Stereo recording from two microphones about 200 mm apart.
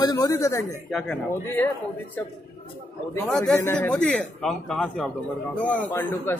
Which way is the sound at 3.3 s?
Centre (ahead or behind).